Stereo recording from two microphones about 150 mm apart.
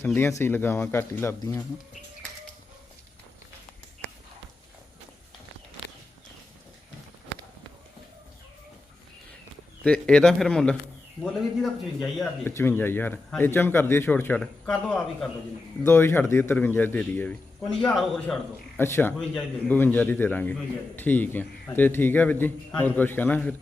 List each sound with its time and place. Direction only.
0.0 s a man's voice: 15° left (ahead or behind)
9.8 s a man's voice: 5° left (ahead or behind)
12.5 s a man's voice: 15° left (ahead or behind)
18.8 s a man's voice: 15° left (ahead or behind)